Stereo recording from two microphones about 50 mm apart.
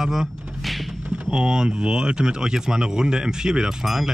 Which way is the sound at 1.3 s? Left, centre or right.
Centre.